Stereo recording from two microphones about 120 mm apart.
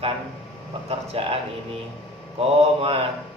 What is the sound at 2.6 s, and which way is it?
Speech, 55° right (ahead or behind).